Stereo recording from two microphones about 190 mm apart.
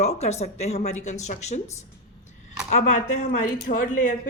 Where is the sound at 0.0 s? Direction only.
35° left (ahead or behind).